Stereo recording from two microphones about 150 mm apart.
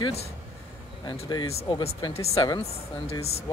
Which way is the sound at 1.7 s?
35° left (ahead or behind).